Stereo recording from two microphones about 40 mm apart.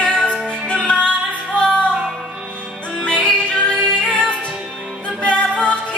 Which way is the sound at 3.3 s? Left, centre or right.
Left.